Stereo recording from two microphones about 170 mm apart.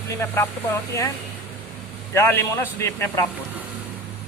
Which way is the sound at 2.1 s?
15° left (ahead or behind).